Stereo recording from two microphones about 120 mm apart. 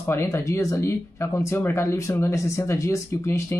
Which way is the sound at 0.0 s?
20° left (ahead or behind).